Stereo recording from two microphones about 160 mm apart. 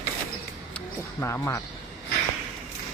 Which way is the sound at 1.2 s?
15° left (ahead or behind).